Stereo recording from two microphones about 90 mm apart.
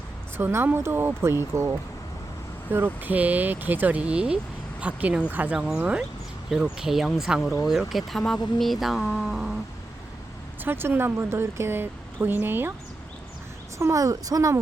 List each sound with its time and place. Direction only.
0.3 s speech: 25° right (ahead or behind)
5.5 s speech: 5° right (ahead or behind)
10.6 s speech: 25° right (ahead or behind)
13.7 s speech: 35° right (ahead or behind)